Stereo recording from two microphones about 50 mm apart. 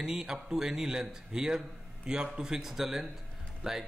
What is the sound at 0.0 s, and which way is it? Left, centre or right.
A man's voice, centre.